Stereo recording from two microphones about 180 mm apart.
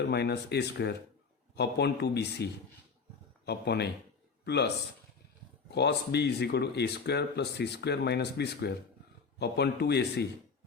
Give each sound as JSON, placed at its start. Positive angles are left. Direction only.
{"t": 0.0, "sound": "a man's voice", "side_deg": 65}
{"t": 5.7, "sound": "speech", "side_deg": 70}